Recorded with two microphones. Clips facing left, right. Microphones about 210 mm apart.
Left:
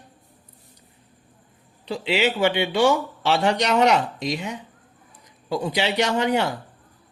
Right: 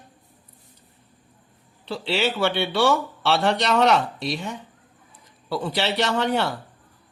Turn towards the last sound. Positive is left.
turn(degrees=10)  # may be behind; listen again after turning